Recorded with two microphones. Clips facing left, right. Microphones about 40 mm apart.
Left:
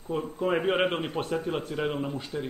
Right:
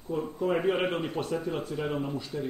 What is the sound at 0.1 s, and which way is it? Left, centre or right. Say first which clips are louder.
A man's voice: left 1 dB; left.